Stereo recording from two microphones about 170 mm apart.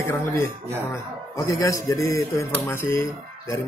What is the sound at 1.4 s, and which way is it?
Speech, 20° left (ahead or behind).